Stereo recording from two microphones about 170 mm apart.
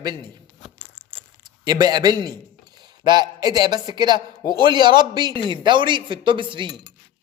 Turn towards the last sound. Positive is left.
turn(degrees=-30)  # may be behind; listen again after turning